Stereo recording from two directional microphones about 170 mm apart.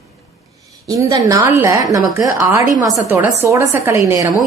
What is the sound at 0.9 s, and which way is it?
A woman's voice, 20° right (ahead or behind).